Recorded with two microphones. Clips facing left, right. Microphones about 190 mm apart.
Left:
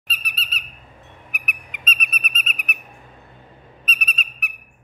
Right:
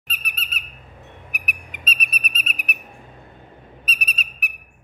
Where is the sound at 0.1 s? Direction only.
50° right (ahead or behind).